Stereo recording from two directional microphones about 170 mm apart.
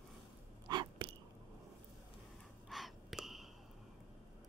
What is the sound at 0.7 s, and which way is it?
Sneeze, 30° right (ahead or behind).